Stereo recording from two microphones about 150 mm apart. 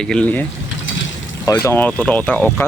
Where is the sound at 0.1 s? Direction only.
10° left (ahead or behind).